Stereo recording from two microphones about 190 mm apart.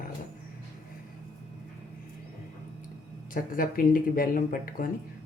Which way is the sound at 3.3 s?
50° left (ahead or behind).